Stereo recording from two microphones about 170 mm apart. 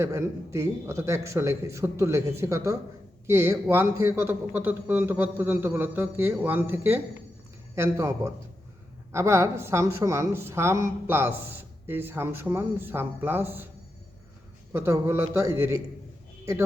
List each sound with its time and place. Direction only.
0.0 s a woman's voice: 15° right (ahead or behind)
14.7 s a woman's voice: 15° right (ahead or behind)